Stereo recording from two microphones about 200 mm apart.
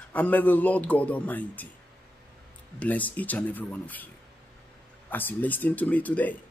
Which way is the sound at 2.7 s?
10° left (ahead or behind).